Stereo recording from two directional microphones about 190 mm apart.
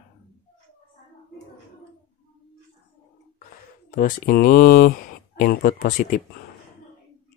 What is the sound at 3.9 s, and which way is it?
Speech, 45° left (ahead or behind).